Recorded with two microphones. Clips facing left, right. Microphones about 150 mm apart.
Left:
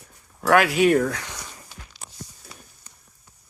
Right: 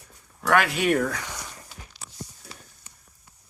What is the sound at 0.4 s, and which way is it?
Speech, 5° left (ahead or behind).